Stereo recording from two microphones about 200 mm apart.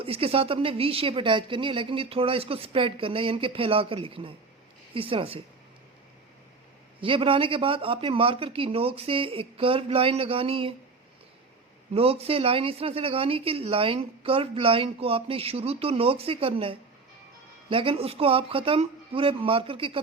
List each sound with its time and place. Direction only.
0.0 s speech: 30° right (ahead or behind)
7.0 s speech: 25° right (ahead or behind)
11.9 s speech: 30° right (ahead or behind)